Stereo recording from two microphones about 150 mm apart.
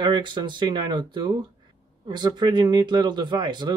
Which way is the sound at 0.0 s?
30° right (ahead or behind).